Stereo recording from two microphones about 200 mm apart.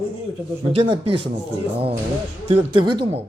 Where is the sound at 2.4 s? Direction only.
25° right (ahead or behind).